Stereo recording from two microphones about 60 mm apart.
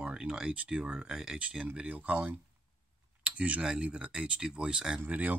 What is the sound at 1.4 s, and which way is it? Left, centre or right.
Speech, right.